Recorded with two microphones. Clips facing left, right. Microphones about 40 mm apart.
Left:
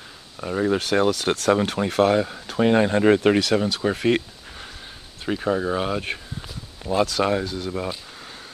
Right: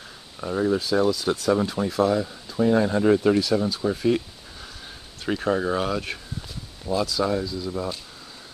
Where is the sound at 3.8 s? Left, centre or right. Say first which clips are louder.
Left 2 dB; left.